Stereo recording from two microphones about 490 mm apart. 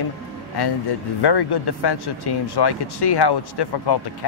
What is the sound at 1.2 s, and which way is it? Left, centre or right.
Speech, left.